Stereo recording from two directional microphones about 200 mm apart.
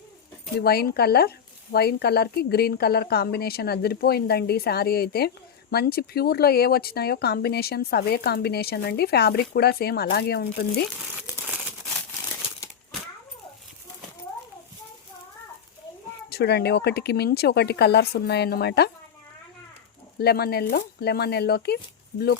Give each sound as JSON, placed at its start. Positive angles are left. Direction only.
{"t": 0.5, "sound": "speech", "side_deg": 50}
{"t": 16.3, "sound": "speech", "side_deg": 55}
{"t": 20.1, "sound": "speech", "side_deg": 50}